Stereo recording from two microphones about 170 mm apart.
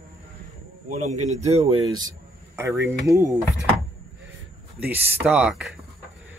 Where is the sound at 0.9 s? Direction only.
45° right (ahead or behind).